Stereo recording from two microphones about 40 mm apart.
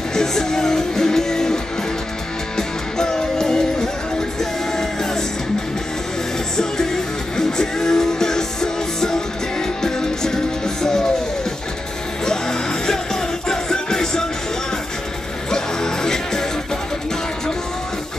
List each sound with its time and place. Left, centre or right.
0.1 s music: centre
6.5 s music: centre
12.3 s music: centre
15.5 s music: centre